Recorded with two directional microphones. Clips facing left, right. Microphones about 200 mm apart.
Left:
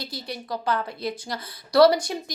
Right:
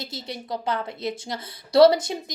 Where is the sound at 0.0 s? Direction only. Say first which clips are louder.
Even; 25° right (ahead or behind).